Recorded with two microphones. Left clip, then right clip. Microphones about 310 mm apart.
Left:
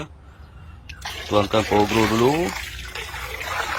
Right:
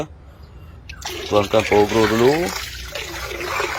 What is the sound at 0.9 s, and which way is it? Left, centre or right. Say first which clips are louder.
Speech: right 3 dB; centre.